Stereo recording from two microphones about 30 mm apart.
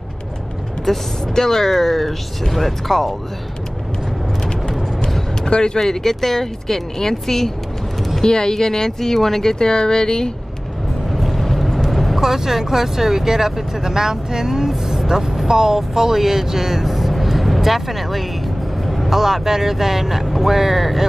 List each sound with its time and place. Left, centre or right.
0.9 s speech: centre
1.2 s speech: centre
5.5 s speech: left
5.8 s speech: centre
8.2 s speech: left
11.1 s vehicle: centre
12.2 s speech: centre
14.7 s speech: centre